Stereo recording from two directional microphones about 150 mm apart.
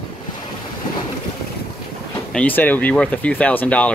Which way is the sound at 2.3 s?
10° left (ahead or behind).